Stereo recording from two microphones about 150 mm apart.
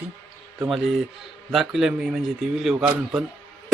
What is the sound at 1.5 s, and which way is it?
Speech, centre (ahead or behind).